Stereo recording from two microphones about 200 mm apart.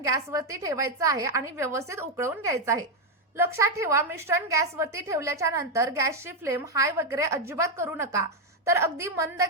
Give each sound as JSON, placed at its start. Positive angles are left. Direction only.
{"t": 0.0, "sound": "a woman's voice", "side_deg": -15}